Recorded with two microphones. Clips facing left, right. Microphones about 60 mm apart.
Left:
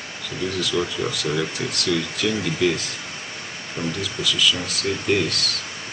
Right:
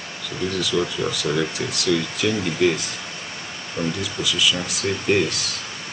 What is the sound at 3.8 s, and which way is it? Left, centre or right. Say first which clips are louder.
Speech: right 2 dB; right.